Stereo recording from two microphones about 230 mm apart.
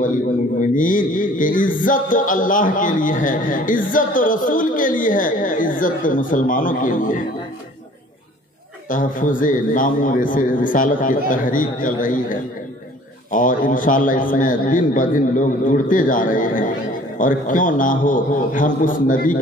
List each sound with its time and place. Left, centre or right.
0.6 s music: left
8.8 s music: left